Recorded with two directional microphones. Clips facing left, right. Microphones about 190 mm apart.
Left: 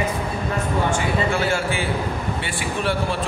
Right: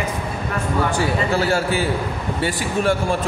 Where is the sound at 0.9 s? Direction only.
40° right (ahead or behind).